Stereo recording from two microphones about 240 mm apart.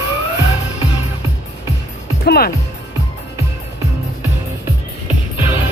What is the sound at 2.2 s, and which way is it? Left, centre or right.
Music, left.